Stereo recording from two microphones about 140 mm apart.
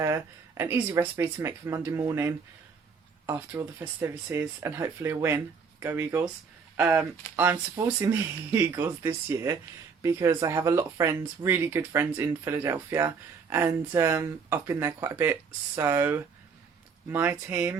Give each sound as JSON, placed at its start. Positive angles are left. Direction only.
{"t": 0.0, "sound": "speech", "side_deg": -20}